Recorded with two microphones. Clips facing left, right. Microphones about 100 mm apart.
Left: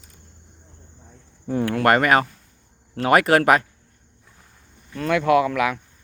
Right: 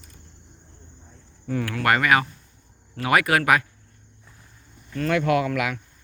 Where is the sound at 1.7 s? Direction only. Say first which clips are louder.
Left 3 dB; 40° left (ahead or behind).